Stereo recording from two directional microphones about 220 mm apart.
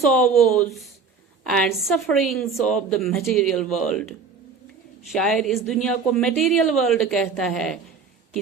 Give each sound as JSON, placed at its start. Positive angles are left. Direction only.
{"t": 0.0, "sound": "speech", "side_deg": 0}
{"t": 5.1, "sound": "speech", "side_deg": 0}